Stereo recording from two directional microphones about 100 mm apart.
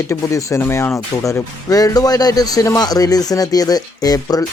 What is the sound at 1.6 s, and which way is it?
A man's voice, 35° left (ahead or behind).